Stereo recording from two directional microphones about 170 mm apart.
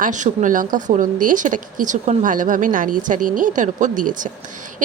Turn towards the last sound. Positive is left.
turn(degrees=-50)  # may be behind; listen again after turning